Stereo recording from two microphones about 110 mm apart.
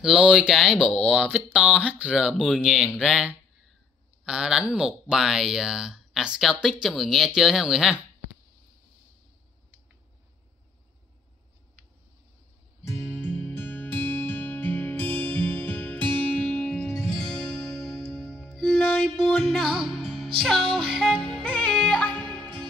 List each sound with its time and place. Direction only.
0.0 s speech: 5° right (ahead or behind)
12.8 s music: 20° left (ahead or behind)